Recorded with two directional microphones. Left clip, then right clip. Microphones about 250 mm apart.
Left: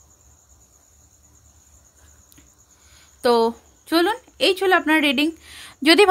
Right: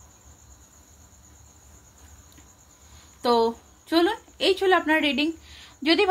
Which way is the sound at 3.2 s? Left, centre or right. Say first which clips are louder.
Left 4 dB; left.